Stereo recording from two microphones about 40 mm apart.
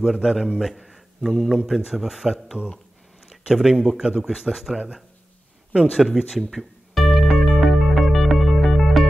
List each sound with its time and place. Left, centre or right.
0.0 s a man's voice: centre
2.5 s speech: right
3.4 s speech: centre
5.9 s speech: centre
6.5 s music: centre